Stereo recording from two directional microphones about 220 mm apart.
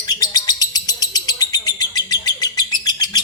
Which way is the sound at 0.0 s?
15° left (ahead or behind).